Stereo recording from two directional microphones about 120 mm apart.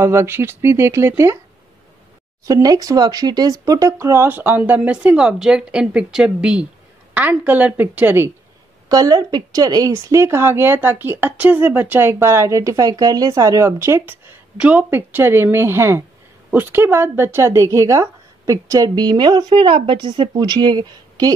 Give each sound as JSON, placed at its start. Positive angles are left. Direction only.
{"t": 0.0, "sound": "a woman's voice", "side_deg": -20}
{"t": 2.4, "sound": "speech", "side_deg": -30}
{"t": 8.8, "sound": "a woman's voice", "side_deg": -35}